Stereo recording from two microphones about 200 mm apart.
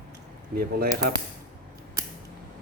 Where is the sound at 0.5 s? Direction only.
50° right (ahead or behind).